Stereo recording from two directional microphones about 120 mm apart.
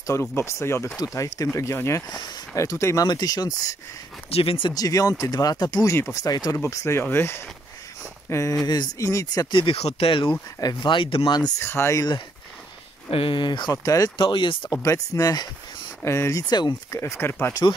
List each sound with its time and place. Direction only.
0.0 s speech: 25° left (ahead or behind)
4.3 s speech: 50° left (ahead or behind)
4.7 s speech: 30° left (ahead or behind)
5.9 s speech: 20° left (ahead or behind)
6.2 s speech: 30° left (ahead or behind)
9.8 s speech: 55° left (ahead or behind)
10.6 s speech: 35° left (ahead or behind)
11.6 s speech: 20° left (ahead or behind)
13.1 s speech: 45° left (ahead or behind); by 14.1 s 30° left (ahead or behind)
14.1 s speech: 40° left (ahead or behind)
14.7 s speech: 30° left (ahead or behind)
17.0 s speech: 20° left (ahead or behind)